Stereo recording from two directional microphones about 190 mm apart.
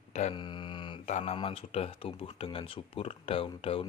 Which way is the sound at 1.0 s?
40° left (ahead or behind).